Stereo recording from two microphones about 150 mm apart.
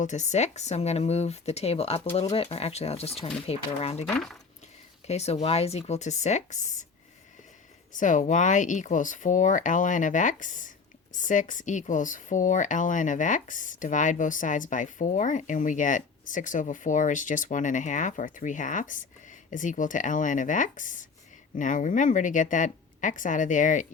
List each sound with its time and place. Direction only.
0.0 s speech: 50° left (ahead or behind)
5.0 s speech: 45° left (ahead or behind)
7.9 s speech: 60° left (ahead or behind)